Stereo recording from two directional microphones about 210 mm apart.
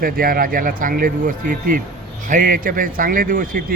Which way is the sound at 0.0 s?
45° right (ahead or behind).